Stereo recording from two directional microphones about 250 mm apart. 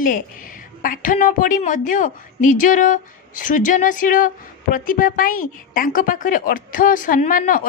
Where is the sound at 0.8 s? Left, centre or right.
Left.